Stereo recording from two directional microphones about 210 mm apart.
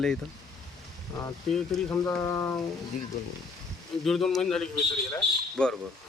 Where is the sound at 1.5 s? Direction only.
5° left (ahead or behind).